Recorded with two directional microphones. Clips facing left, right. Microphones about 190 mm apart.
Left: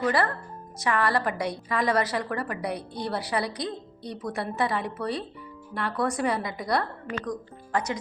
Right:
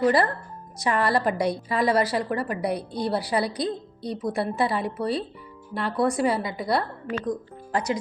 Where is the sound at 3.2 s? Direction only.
35° right (ahead or behind).